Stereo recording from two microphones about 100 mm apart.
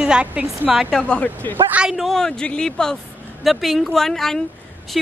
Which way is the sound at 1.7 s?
5° right (ahead or behind).